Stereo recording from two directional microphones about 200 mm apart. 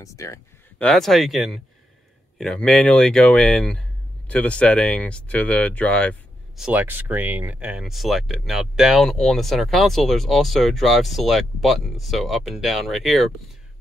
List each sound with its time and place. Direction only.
0.0 s speech: 15° left (ahead or behind)
0.8 s speech: centre (ahead or behind)